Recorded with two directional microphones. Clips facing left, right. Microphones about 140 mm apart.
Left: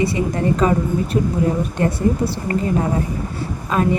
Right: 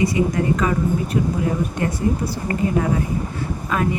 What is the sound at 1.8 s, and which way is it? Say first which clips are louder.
Speech: left 6 dB; 35° left (ahead or behind).